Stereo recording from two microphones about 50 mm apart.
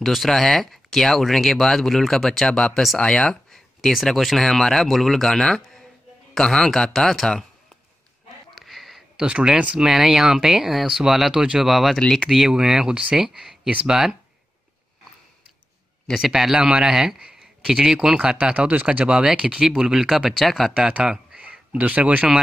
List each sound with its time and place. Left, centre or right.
0.0 s speech: centre
4.0 s speech: centre
8.5 s a sound: centre
9.2 s speech: centre
9.8 s speech: centre
16.2 s speech: centre
21.0 s speech: centre